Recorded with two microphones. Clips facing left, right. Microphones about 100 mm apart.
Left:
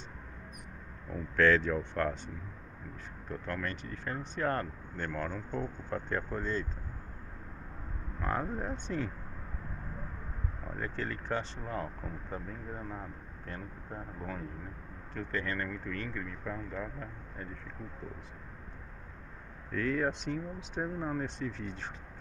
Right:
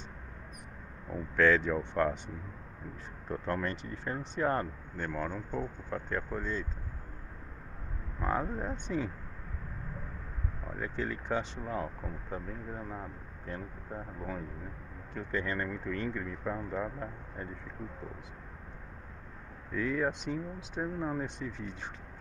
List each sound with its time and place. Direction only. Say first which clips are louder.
1.1 s speech: even; 10° right (ahead or behind)
3.3 s speech: right 4 dB; 25° right (ahead or behind); by 6.7 s 5° right (ahead or behind)
8.2 s speech: right 2 dB; 10° right (ahead or behind)
10.8 s speech: right 2 dB; 5° right (ahead or behind)
15.1 s speech: right 1 dB; 15° right (ahead or behind)
19.7 s speech: even; 5° right (ahead or behind)